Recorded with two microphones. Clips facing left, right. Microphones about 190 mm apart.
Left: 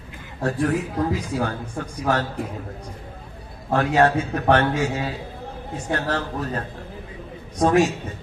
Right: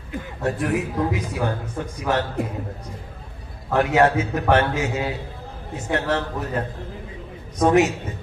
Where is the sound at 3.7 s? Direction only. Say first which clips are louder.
Right 1 dB; 20° right (ahead or behind).